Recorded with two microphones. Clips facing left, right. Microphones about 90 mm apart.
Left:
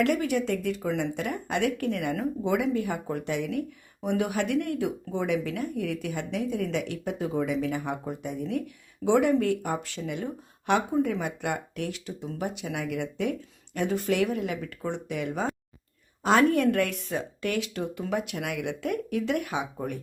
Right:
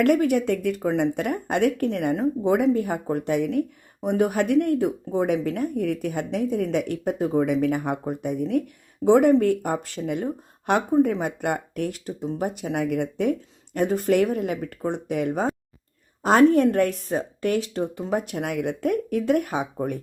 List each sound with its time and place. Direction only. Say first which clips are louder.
0.0 s speech: right 6 dB; 50° right (ahead or behind)